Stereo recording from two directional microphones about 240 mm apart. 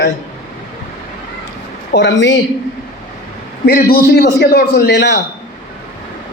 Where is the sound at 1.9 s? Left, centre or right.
Left.